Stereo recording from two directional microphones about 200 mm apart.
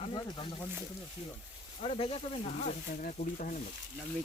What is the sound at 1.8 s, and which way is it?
Speech, 30° left (ahead or behind).